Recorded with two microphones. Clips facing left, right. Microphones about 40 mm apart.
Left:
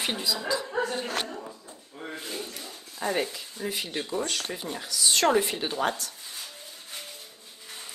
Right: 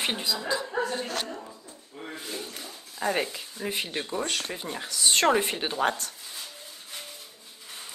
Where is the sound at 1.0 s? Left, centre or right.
Left.